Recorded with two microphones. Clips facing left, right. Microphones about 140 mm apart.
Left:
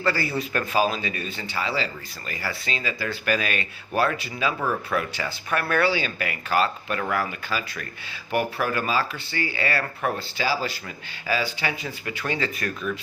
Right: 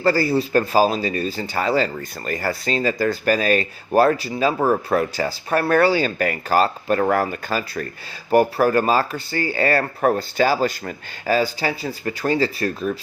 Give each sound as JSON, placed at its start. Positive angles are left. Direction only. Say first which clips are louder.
{"t": 0.0, "sound": "speech", "louder": "right 7 dB", "side_deg": -40}